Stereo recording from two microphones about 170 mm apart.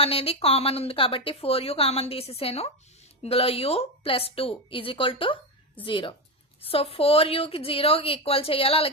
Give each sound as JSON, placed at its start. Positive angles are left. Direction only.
{"t": 0.0, "sound": "a woman's voice", "side_deg": 35}